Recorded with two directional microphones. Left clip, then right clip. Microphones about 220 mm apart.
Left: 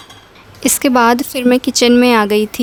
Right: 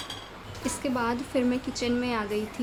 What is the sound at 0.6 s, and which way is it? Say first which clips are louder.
Speech: left 18 dB; 50° left (ahead or behind).